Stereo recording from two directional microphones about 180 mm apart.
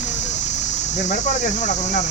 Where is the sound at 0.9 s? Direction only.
40° left (ahead or behind).